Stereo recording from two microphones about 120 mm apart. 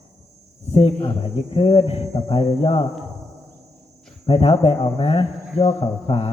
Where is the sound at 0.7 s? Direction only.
55° left (ahead or behind).